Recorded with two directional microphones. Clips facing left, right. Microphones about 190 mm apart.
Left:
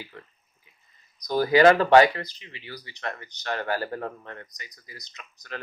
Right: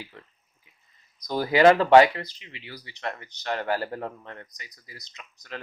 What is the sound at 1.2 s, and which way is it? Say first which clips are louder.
Speech: left 1 dB; 25° right (ahead or behind).